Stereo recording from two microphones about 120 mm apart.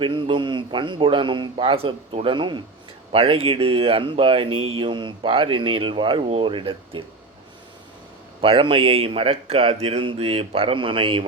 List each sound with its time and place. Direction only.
0.0 s speech: 45° right (ahead or behind)
8.4 s speech: 45° right (ahead or behind)